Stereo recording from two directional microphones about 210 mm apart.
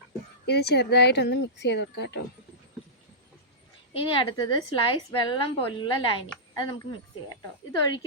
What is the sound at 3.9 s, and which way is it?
Speech, 25° left (ahead or behind).